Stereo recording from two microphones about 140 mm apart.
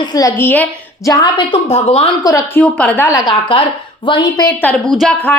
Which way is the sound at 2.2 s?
25° left (ahead or behind).